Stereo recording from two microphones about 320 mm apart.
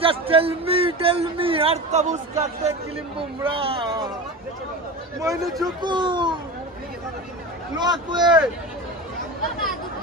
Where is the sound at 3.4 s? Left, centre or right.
Centre.